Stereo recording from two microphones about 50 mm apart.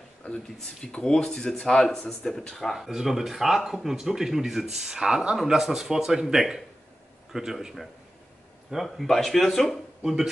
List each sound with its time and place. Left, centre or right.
0.2 s speech: left
0.9 s speech: centre